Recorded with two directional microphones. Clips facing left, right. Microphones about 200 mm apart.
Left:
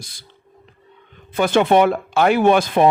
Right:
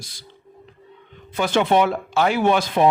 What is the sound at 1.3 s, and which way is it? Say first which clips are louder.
Speech: left 4 dB; 50° left (ahead or behind).